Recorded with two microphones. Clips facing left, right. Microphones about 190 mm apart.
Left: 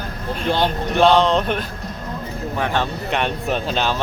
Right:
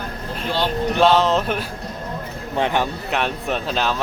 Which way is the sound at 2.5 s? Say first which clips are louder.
Right 2 dB; 20° right (ahead or behind).